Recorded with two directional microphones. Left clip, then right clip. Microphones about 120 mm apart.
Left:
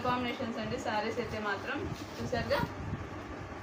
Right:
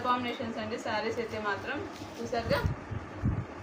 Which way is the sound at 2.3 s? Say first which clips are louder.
Right 2 dB; 5° right (ahead or behind).